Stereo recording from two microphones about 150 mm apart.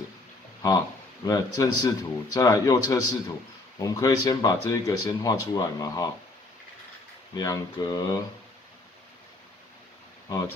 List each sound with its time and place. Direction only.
1.2 s speech: 25° left (ahead or behind)
7.3 s speech: 25° left (ahead or behind)